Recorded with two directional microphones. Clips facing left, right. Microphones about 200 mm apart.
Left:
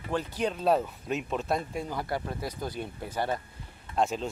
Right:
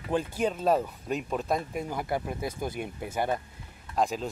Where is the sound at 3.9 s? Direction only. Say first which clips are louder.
Even; centre (ahead or behind).